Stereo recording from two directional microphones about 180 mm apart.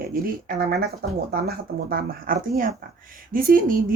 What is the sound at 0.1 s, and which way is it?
Speech, 55° right (ahead or behind).